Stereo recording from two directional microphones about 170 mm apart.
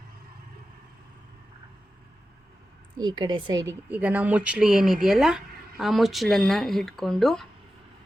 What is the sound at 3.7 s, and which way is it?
Speech, 10° right (ahead or behind).